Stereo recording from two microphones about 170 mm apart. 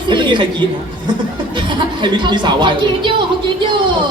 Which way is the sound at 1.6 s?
30° right (ahead or behind).